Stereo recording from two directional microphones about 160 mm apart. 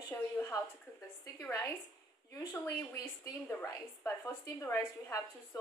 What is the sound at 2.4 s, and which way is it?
A woman's voice, 20° left (ahead or behind).